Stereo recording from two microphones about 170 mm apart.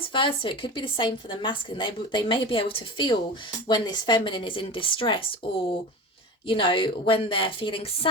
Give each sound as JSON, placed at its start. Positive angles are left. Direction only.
{"t": 0.0, "sound": "a woman's voice", "side_deg": 30}
{"t": 6.5, "sound": "a woman's voice", "side_deg": 30}